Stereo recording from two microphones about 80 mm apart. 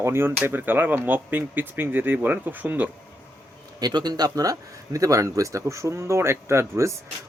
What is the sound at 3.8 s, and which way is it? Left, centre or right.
Speech, right.